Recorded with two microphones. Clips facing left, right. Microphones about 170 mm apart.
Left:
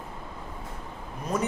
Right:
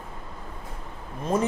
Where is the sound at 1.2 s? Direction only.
30° right (ahead or behind).